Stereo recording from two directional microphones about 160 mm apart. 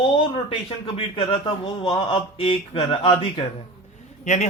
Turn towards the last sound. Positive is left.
turn(degrees=45)  # may be behind; listen again after turning